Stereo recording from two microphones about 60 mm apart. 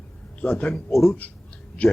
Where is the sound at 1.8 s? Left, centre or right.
Left.